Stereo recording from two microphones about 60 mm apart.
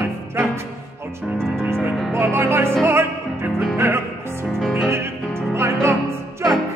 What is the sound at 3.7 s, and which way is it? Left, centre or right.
Music, right.